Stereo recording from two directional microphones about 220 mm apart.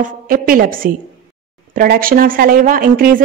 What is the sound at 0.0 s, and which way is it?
Speech, 40° right (ahead or behind).